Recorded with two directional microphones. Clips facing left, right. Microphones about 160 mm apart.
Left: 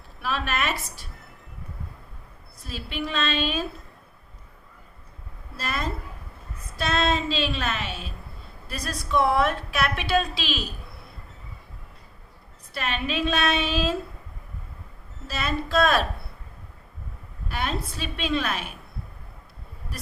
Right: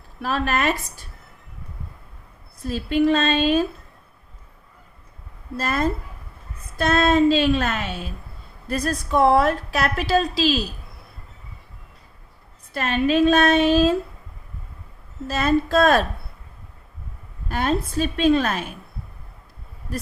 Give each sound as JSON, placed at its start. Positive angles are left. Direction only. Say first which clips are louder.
{"t": 0.2, "sound": "a woman's voice", "louder": "right 5 dB", "side_deg": -45}
{"t": 2.6, "sound": "a woman's voice", "louder": "right 13 dB", "side_deg": -45}
{"t": 5.5, "sound": "a woman's voice", "louder": "right 7 dB", "side_deg": -50}
{"t": 12.7, "sound": "a woman's voice", "louder": "right 9 dB", "side_deg": -45}
{"t": 15.3, "sound": "a woman's voice", "louder": "right 8 dB", "side_deg": -45}
{"t": 17.5, "sound": "a woman's voice", "louder": "right 7 dB", "side_deg": -45}